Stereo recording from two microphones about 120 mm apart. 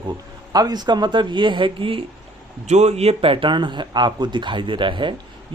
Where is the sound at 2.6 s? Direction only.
70° right (ahead or behind); by 5.1 s 45° right (ahead or behind).